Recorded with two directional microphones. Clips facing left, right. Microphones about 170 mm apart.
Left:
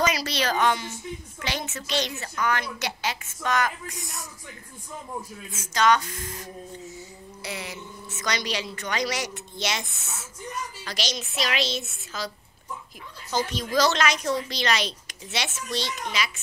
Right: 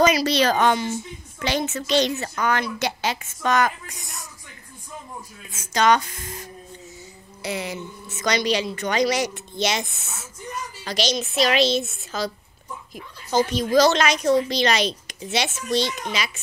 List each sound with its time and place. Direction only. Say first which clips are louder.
0.0 s speech: right 7 dB; 25° right (ahead or behind)
5.7 s speech: right 3 dB; 20° right (ahead or behind)
7.4 s speech: right 7 dB; 20° right (ahead or behind)
13.4 s speech: right 6 dB; 15° right (ahead or behind)